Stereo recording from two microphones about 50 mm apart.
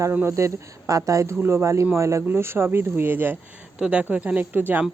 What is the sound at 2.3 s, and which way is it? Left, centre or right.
Speech, right.